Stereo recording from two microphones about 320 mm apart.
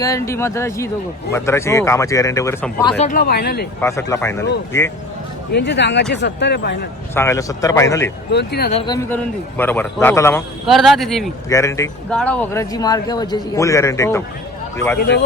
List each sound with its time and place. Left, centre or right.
0.0 s a man's voice: centre
3.0 s speech: left
3.8 s a man's voice: centre
5.5 s speech: left
7.1 s a man's voice: centre
8.3 s speech: left
8.9 s a man's voice: centre